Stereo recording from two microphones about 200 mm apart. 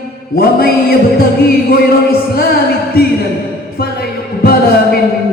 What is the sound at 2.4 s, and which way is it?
Music, 50° left (ahead or behind).